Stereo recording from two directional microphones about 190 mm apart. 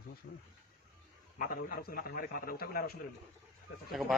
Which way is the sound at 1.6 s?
50° left (ahead or behind).